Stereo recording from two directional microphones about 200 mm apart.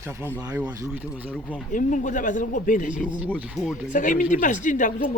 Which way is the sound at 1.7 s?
40° left (ahead or behind).